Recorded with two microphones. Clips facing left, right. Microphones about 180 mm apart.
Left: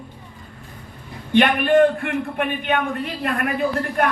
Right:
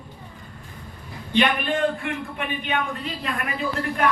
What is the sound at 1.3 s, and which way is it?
A man's voice, 55° left (ahead or behind).